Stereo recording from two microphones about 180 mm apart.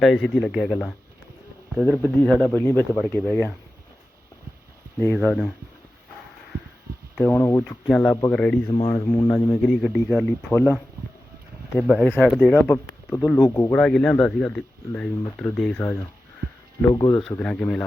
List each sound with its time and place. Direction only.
0.0 s speech: centre (ahead or behind)
2.6 s speech: 10° left (ahead or behind)
5.2 s speech: centre (ahead or behind)
7.2 s speech: 5° left (ahead or behind)
8.7 s speech: 25° left (ahead or behind)
9.6 s speech: 5° left (ahead or behind)
11.8 s speech: centre (ahead or behind)
13.4 s speech: 20° left (ahead or behind)
13.7 s speech: 5° left (ahead or behind); by 17.2 s 20° left (ahead or behind)
17.2 s speech: 5° left (ahead or behind)